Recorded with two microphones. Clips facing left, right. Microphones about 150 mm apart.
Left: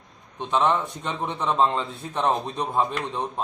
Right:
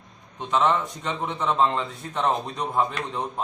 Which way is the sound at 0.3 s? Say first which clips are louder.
Even; 15° left (ahead or behind).